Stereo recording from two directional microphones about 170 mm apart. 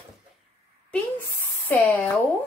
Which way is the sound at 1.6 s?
15° left (ahead or behind).